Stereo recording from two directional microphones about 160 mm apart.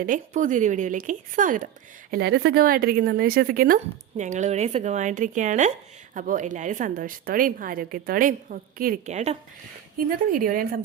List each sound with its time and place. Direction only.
0.0 s a woman's voice: 55° right (ahead or behind)
2.0 s speech: 80° right
4.2 s a woman's voice: 50° right (ahead or behind)
9.0 s a woman's voice: 45° right (ahead or behind)
10.3 s a woman's voice: 60° right (ahead or behind)